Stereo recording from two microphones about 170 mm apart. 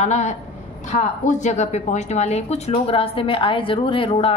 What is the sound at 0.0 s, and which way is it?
A woman's voice, 45° left (ahead or behind).